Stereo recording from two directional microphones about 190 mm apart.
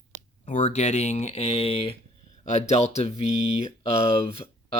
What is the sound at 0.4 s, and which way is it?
Speech, 40° left (ahead or behind).